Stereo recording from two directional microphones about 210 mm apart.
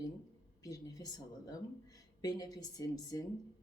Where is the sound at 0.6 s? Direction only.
15° left (ahead or behind).